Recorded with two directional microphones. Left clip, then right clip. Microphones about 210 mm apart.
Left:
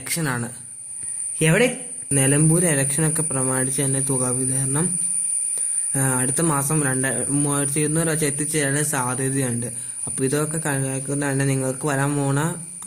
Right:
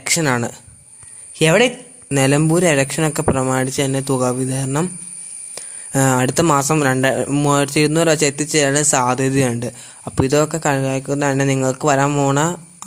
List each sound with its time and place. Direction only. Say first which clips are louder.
0.0 s speech: right 9 dB; 45° right (ahead or behind)